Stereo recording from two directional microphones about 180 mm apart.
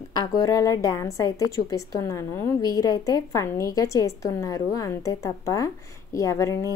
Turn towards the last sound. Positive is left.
turn(degrees=15)  # may be behind; listen again after turning